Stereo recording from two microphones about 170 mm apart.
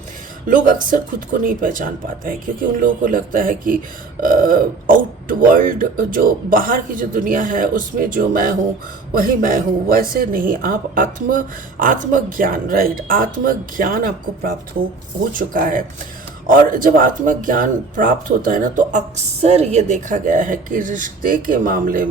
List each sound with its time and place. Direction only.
0.4 s speech: 55° right (ahead or behind)